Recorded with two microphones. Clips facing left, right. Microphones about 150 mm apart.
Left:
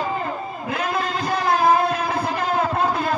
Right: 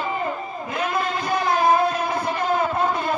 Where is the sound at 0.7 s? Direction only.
65° left (ahead or behind).